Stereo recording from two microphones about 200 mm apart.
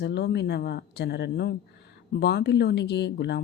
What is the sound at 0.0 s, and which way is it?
Speech, 55° left (ahead or behind).